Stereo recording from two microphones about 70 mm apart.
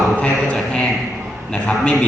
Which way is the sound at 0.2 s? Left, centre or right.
Centre.